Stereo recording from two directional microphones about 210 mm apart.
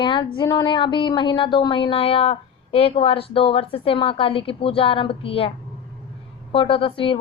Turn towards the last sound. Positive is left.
turn(degrees=25)  # may be behind; listen again after turning